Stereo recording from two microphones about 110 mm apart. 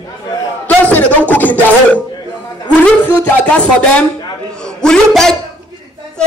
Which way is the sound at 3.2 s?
10° left (ahead or behind).